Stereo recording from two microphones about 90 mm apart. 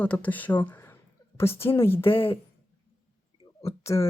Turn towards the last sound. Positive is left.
turn(degrees=30)  # may be behind; listen again after turning